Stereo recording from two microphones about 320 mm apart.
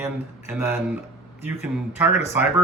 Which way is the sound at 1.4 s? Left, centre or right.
Centre.